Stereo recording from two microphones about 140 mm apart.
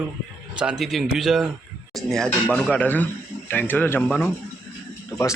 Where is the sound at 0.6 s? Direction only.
5° right (ahead or behind).